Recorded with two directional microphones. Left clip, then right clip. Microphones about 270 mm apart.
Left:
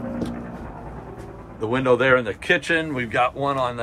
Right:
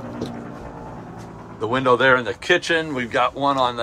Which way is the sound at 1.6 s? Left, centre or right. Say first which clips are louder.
Right 2 dB; centre.